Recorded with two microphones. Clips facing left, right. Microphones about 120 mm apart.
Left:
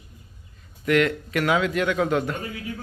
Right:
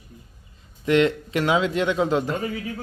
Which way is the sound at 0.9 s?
25° right (ahead or behind).